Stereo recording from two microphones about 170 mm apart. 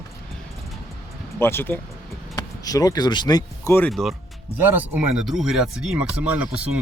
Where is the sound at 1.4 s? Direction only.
15° left (ahead or behind).